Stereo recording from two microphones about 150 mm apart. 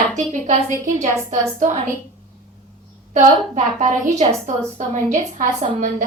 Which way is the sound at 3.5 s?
55° right (ahead or behind).